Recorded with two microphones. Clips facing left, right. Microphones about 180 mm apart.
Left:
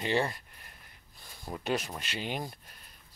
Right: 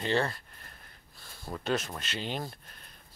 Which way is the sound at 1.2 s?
15° left (ahead or behind).